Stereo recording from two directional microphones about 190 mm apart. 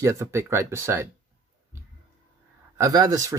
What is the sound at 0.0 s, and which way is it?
Speech, 15° right (ahead or behind).